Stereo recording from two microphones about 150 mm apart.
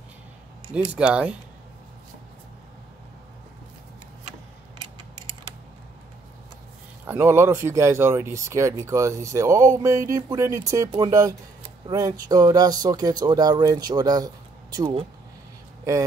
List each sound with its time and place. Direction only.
0.9 s speech: 5° right (ahead or behind)
7.1 s speech: 15° right (ahead or behind); by 15.0 s 35° right (ahead or behind)
15.8 s speech: 20° right (ahead or behind)